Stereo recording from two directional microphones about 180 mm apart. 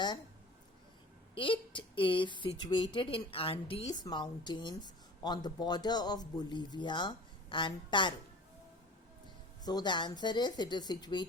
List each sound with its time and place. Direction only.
1.4 s a woman's voice: 30° left (ahead or behind)
9.6 s a woman's voice: 25° left (ahead or behind)